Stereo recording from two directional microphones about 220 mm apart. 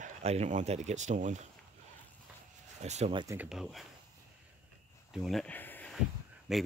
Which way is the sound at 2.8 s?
30° right (ahead or behind).